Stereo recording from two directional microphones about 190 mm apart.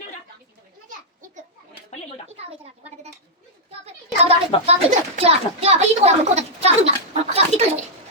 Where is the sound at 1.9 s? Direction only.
35° left (ahead or behind).